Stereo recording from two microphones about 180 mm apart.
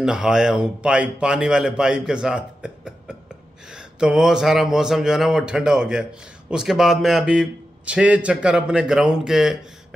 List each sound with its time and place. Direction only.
0.0 s speech: 5° right (ahead or behind)